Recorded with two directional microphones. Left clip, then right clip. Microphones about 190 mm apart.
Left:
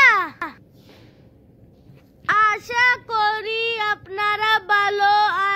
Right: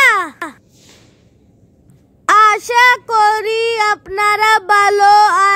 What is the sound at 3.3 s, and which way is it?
Female singing, 35° right (ahead or behind).